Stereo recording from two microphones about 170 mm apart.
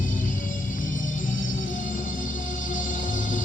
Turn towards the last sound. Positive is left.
turn(degrees=50)  # may be behind; listen again after turning